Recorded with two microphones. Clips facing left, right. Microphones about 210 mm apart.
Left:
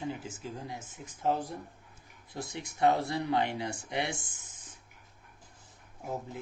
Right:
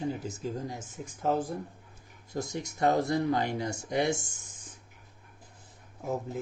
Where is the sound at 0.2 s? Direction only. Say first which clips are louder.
Right 6 dB; 40° right (ahead or behind).